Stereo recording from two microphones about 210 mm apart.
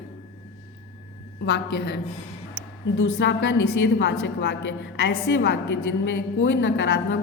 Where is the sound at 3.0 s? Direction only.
65° left (ahead or behind).